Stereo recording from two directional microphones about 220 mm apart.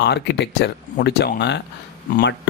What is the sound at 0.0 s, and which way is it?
Speech, 50° left (ahead or behind).